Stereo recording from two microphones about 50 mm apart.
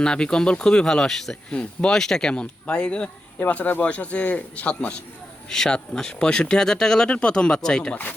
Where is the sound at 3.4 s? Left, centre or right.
Left.